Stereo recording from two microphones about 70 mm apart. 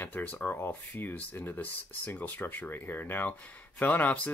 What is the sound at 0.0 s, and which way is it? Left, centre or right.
Speech, left.